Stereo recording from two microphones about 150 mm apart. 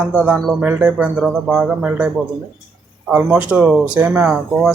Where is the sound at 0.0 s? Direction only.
5° right (ahead or behind).